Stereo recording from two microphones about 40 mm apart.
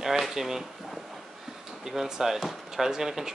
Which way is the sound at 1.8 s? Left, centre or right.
Centre.